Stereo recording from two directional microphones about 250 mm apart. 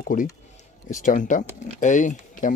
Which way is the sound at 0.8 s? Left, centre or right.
Left.